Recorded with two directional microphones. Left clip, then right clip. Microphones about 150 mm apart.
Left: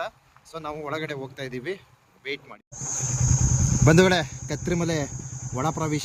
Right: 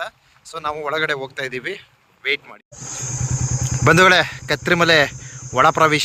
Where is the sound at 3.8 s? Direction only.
Centre (ahead or behind).